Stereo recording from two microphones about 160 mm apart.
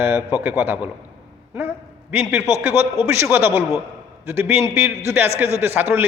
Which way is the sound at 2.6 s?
15° right (ahead or behind).